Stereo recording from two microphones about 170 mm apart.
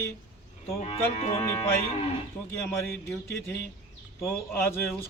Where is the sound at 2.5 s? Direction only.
10° left (ahead or behind).